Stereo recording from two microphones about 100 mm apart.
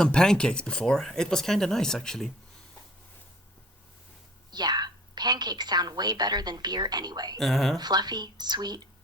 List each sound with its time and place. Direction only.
0.0 s speech: 5° left (ahead or behind)
4.5 s a woman's voice: 45° right (ahead or behind)
7.3 s speech: centre (ahead or behind)
7.8 s a woman's voice: 45° right (ahead or behind)